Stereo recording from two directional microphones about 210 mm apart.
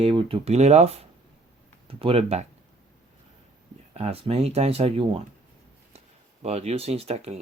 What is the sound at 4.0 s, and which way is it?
Speech, 30° right (ahead or behind).